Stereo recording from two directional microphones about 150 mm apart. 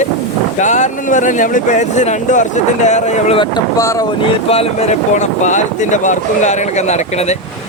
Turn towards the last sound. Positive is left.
turn(degrees=45)  # may be behind; listen again after turning